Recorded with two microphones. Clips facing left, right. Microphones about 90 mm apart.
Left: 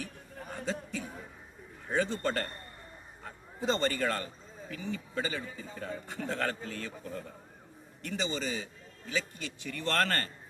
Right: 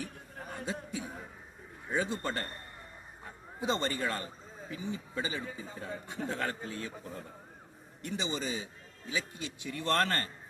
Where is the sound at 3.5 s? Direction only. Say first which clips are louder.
Left 2 dB; 15° right (ahead or behind).